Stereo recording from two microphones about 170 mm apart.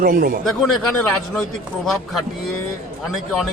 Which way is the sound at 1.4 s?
Centre (ahead or behind).